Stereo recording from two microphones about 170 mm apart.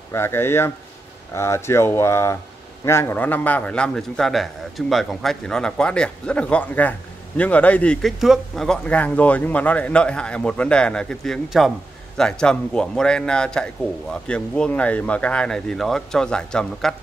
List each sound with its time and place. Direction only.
0.1 s a man's voice: 15° left (ahead or behind)